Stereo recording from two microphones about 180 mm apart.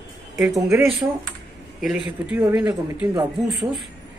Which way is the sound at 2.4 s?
15° right (ahead or behind).